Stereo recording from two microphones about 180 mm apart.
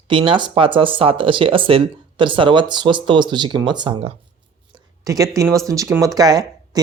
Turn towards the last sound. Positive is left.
turn(degrees=-20)  # may be behind; listen again after turning